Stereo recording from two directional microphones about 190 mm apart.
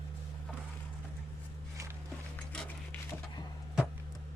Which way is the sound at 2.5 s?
5° left (ahead or behind).